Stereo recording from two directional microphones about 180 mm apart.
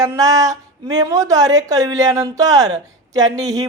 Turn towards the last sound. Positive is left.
turn(degrees=-20)  # may be behind; listen again after turning